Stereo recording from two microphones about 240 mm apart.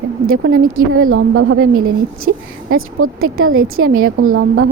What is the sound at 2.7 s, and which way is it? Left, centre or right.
A woman's voice, right.